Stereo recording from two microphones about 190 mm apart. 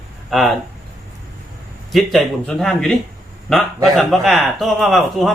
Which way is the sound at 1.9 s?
Centre (ahead or behind).